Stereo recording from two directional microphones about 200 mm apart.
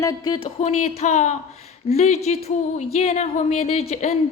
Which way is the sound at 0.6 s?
35° left (ahead or behind).